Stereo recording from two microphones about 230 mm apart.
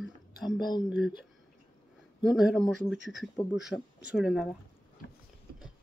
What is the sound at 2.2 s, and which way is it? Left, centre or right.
Speech, centre.